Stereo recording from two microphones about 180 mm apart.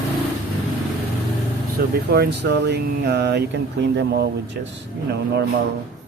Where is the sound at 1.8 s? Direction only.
55° right (ahead or behind).